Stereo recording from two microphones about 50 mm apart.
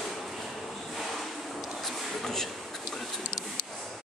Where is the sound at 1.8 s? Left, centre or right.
Centre.